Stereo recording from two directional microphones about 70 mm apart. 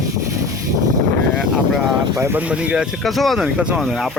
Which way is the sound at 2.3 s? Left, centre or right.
Centre.